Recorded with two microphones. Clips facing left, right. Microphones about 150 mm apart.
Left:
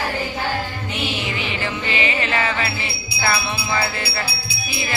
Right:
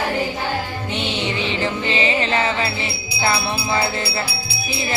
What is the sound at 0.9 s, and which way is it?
Music, 30° right (ahead or behind).